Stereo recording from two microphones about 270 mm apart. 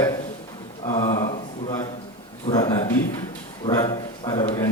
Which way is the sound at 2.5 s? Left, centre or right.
Centre.